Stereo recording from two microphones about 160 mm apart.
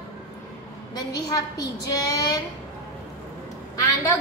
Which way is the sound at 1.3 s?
20° left (ahead or behind).